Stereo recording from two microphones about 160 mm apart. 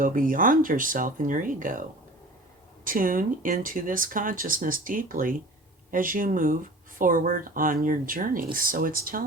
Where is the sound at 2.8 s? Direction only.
60° right (ahead or behind).